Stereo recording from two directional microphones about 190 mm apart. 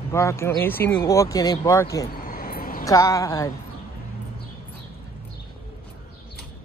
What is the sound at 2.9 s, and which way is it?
Speech, 15° left (ahead or behind).